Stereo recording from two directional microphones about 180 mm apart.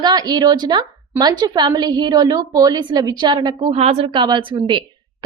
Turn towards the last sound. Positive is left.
turn(degrees=-25)  # may be behind; listen again after turning